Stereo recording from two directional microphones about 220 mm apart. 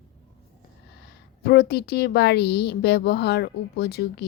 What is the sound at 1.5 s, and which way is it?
Speech, 45° left (ahead or behind).